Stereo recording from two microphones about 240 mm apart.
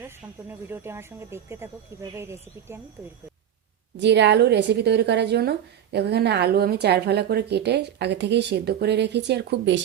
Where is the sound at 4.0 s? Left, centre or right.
Right.